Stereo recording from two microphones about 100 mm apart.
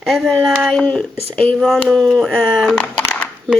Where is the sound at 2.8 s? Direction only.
15° left (ahead or behind).